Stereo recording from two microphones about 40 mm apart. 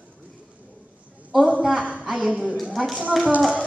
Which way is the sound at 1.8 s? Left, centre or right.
Right.